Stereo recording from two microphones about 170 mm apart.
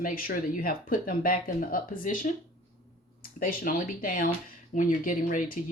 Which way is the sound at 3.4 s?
55° left (ahead or behind).